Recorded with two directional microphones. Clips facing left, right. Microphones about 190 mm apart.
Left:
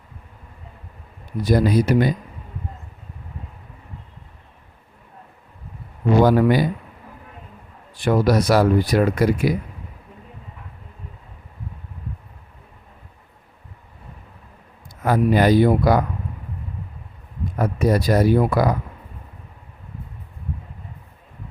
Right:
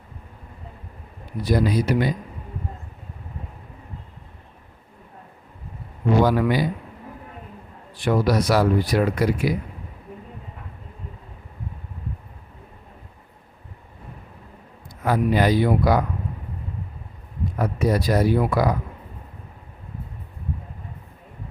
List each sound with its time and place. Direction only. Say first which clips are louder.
1.4 s speech: left 3 dB; 45° left (ahead or behind)
6.2 s speech: left 4 dB; 45° left (ahead or behind)
8.0 s speech: left 3 dB; 45° left (ahead or behind)
15.0 s speech: left 3 dB; 45° left (ahead or behind)
17.6 s speech: left 3 dB; 45° left (ahead or behind)